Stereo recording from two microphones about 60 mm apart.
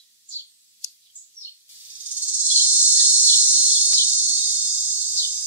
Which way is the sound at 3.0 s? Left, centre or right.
Right.